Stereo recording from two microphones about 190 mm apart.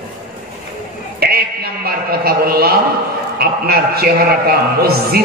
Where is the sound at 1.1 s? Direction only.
55° right (ahead or behind).